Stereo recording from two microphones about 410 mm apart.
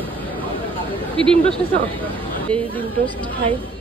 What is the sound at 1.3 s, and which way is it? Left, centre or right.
Speech, centre.